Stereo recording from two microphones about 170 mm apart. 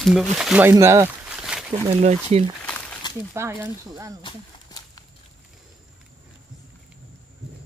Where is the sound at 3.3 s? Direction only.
15° right (ahead or behind).